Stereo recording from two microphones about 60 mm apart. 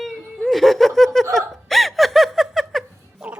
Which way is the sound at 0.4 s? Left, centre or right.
Centre.